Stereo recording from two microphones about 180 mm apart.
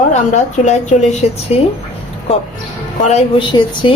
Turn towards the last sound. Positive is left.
turn(degrees=25)  # may be behind; listen again after turning